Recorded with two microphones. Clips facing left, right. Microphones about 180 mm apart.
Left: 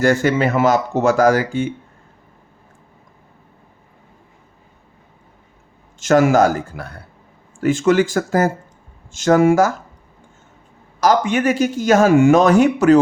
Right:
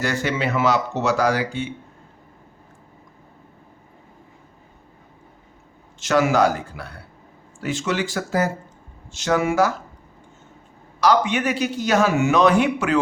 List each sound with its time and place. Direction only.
0.0 s a man's voice: 50° left (ahead or behind)
6.0 s a man's voice: 50° left (ahead or behind)
11.0 s a man's voice: 45° left (ahead or behind)